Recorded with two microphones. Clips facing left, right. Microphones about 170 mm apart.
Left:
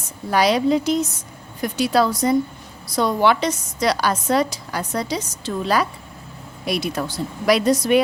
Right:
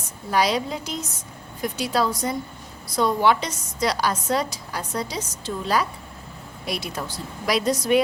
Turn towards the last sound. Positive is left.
turn(degrees=65)  # may be behind; listen again after turning